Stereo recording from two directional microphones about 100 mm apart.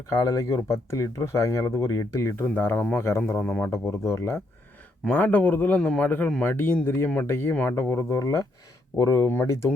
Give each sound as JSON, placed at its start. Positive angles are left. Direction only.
{"t": 0.1, "sound": "speech", "side_deg": 35}
{"t": 3.7, "sound": "speech", "side_deg": 30}
{"t": 5.0, "sound": "a man's voice", "side_deg": 15}
{"t": 9.3, "sound": "speech", "side_deg": 25}